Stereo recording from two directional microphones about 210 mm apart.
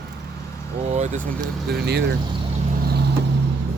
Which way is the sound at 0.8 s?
35° right (ahead or behind).